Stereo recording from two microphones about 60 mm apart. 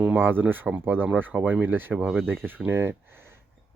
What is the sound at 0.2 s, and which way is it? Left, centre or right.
Speech, right.